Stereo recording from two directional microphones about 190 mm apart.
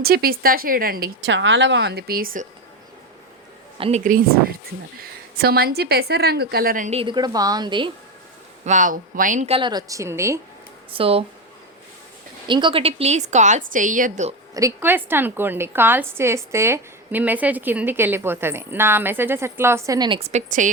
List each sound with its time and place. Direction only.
0.0 s speech: 50° right (ahead or behind)
1.3 s a woman's voice: 70° right (ahead or behind); by 2.5 s 45° right (ahead or behind)
3.8 s a woman's voice: 30° right (ahead or behind)
5.4 s a woman's voice: 55° right (ahead or behind)
7.0 s a woman's voice: 25° right (ahead or behind)
8.6 s a woman's voice: 40° right (ahead or behind)
9.6 s a woman's voice: 20° right (ahead or behind)
10.9 s a woman's voice: 30° right (ahead or behind)
12.5 s a woman's voice: 25° right (ahead or behind); by 14.3 s 40° right (ahead or behind)
14.5 s a woman's voice: 15° right (ahead or behind); by 20.7 s 40° right (ahead or behind)